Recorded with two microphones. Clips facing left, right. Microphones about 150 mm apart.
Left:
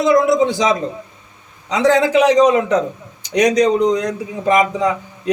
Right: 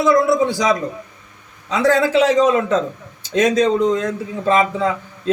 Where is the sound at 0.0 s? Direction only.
20° left (ahead or behind).